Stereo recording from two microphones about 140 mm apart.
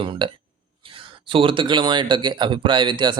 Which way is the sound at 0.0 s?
35° right (ahead or behind).